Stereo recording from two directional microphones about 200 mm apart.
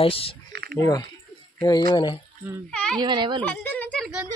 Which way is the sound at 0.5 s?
50° right (ahead or behind).